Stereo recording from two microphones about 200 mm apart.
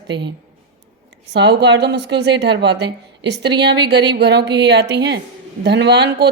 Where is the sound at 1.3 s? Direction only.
60° right (ahead or behind).